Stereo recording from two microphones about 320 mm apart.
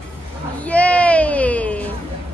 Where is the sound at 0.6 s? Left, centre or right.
Centre.